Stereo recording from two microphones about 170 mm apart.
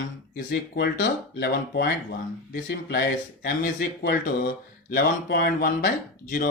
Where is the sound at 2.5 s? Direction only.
85° left.